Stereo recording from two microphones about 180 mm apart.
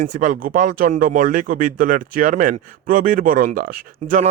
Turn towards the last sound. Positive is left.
turn(degrees=-50)  # may be behind; listen again after turning